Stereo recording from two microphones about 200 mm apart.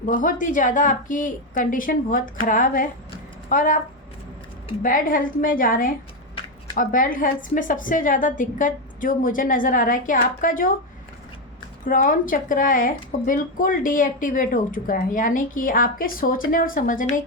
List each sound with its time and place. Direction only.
0.0 s a woman's voice: 40° left (ahead or behind)
4.8 s speech: 40° left (ahead or behind)
11.9 s speech: 45° left (ahead or behind)